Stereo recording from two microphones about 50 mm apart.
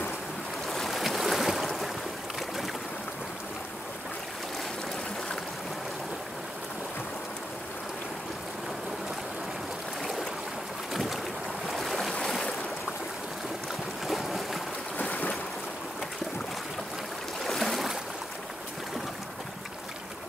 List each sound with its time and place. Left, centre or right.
0.7 s boat: centre
10.9 s boat: centre
12.3 s boat: centre
14.0 s boat: centre
15.0 s boat: left
17.5 s boat: centre